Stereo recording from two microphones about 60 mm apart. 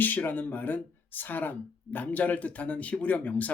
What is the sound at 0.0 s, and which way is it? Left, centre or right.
Speech, left.